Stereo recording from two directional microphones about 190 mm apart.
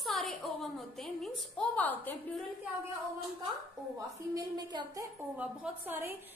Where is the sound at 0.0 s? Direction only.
Centre (ahead or behind).